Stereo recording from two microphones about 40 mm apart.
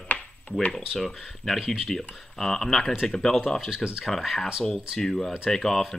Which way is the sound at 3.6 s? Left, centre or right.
Centre.